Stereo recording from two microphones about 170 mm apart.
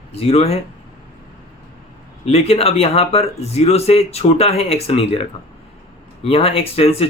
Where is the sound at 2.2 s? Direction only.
35° left (ahead or behind).